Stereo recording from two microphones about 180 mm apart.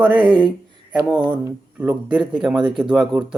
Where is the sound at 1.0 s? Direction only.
5° right (ahead or behind).